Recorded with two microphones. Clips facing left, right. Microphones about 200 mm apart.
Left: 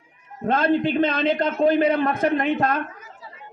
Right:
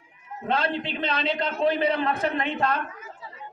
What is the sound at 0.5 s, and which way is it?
A man's voice, 50° left (ahead or behind).